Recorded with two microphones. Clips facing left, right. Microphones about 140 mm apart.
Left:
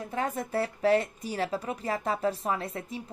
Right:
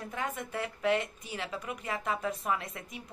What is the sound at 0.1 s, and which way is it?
A woman's voice, 35° left (ahead or behind).